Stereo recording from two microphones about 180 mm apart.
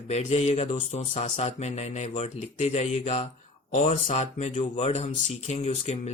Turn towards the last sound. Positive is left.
turn(degrees=40)  # may be behind; listen again after turning